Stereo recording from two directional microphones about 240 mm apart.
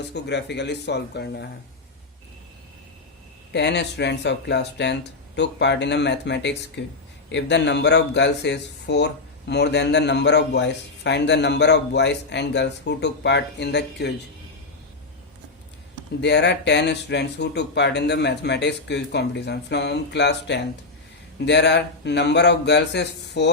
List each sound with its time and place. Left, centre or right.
0.1 s speech: left
3.5 s speech: left
16.2 s speech: left